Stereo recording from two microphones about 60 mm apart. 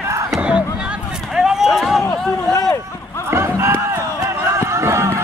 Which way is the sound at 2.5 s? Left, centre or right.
Left.